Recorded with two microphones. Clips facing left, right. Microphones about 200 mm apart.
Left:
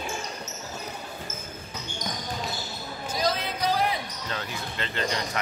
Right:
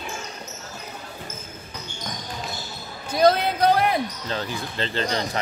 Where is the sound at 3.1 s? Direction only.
60° right (ahead or behind).